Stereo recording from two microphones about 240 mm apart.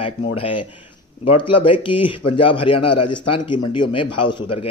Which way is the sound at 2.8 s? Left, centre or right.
Left.